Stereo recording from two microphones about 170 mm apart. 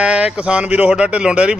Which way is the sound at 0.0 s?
5° right (ahead or behind).